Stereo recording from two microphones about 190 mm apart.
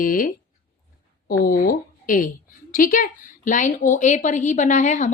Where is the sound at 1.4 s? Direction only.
45° left (ahead or behind).